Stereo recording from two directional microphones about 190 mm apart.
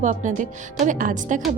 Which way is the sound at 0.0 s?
40° right (ahead or behind).